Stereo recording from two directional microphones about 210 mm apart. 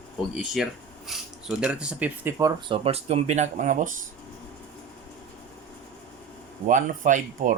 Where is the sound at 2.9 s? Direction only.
30° right (ahead or behind).